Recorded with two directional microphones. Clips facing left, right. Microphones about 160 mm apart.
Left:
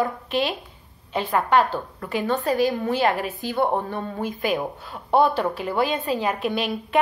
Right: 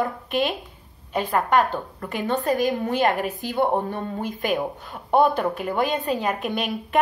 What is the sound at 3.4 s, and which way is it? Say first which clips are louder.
Speech: right 1 dB; 15° right (ahead or behind).